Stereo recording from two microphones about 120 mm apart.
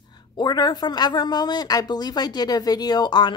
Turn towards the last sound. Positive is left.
turn(degrees=40)  # may be behind; listen again after turning